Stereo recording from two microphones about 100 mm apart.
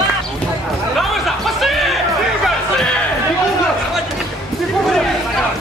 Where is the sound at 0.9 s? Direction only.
Centre (ahead or behind).